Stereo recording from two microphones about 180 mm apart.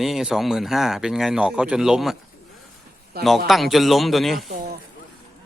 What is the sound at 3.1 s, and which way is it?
Speech, 60° right (ahead or behind).